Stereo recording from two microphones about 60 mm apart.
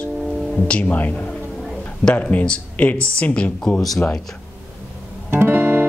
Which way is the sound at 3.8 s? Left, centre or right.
Centre.